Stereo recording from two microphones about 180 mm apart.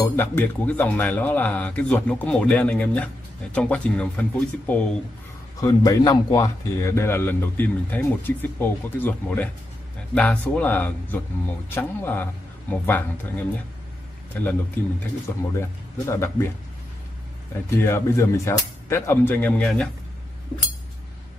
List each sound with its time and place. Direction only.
0.0 s a man's voice: 10° left (ahead or behind)
5.6 s a man's voice: 20° left (ahead or behind)
14.3 s a man's voice: 10° left (ahead or behind)
17.6 s a man's voice: 15° left (ahead or behind)